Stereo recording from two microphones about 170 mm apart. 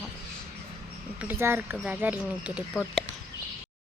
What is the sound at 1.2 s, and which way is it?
Speech, 10° right (ahead or behind).